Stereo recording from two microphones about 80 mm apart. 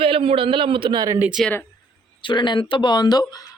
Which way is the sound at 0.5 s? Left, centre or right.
Right.